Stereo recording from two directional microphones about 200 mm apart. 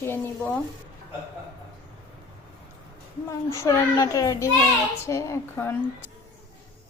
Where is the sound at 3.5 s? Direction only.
15° left (ahead or behind).